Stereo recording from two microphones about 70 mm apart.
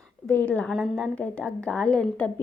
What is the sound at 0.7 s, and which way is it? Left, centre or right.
Speech, centre.